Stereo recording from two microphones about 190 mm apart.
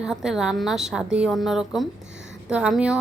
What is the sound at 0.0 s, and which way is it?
A woman's voice, 5° right (ahead or behind).